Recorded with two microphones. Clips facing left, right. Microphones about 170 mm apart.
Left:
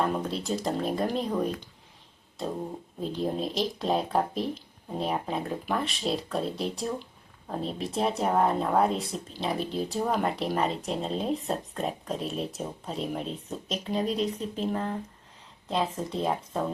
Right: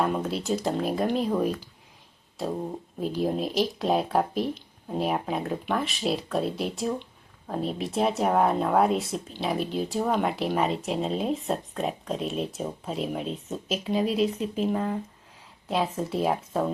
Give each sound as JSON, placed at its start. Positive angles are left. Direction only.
{"t": 0.0, "sound": "speech", "side_deg": 0}
{"t": 3.0, "sound": "speech", "side_deg": -5}